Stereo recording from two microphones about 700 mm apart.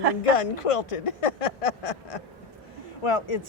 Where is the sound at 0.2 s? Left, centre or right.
Left.